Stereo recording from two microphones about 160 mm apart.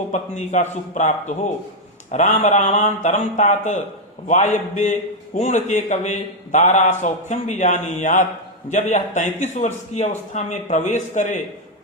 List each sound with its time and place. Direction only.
0.1 s a man's voice: 50° left (ahead or behind)